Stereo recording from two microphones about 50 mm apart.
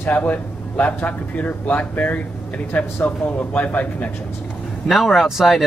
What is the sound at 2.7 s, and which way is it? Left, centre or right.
Speech, left.